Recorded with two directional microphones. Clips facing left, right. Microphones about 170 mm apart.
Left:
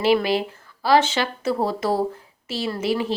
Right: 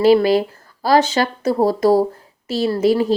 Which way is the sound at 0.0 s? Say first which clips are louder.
Right 7 dB; 40° right (ahead or behind).